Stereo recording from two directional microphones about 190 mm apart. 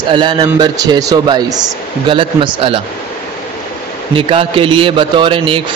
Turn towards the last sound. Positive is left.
turn(degrees=-25)  # may be behind; listen again after turning